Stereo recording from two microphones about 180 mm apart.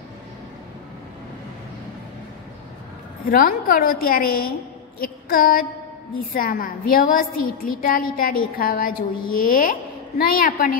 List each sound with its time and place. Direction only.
3.3 s a woman's voice: 55° left (ahead or behind)
4.9 s female singing: 55° left (ahead or behind)
6.1 s a woman's voice: 55° left (ahead or behind)